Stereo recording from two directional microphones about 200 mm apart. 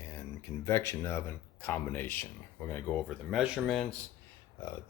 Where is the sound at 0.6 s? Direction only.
15° left (ahead or behind).